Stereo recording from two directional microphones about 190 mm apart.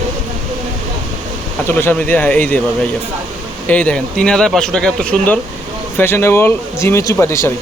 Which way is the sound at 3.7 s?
5° left (ahead or behind).